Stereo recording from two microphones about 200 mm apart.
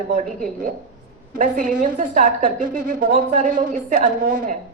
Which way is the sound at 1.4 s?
40° right (ahead or behind).